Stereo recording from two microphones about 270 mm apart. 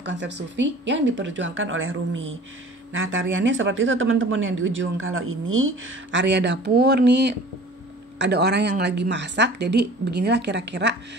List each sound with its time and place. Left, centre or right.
0.0 s a woman's voice: right